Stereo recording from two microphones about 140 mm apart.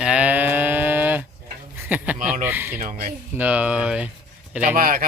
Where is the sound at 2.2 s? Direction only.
65° right (ahead or behind).